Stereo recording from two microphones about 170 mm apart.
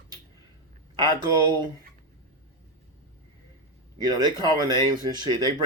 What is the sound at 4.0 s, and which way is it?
Speech, 25° right (ahead or behind).